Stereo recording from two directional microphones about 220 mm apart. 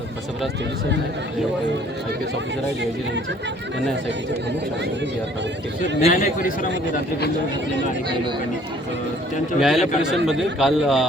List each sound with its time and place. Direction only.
6.0 s a man's voice: 40° left (ahead or behind)
9.6 s speech: centre (ahead or behind)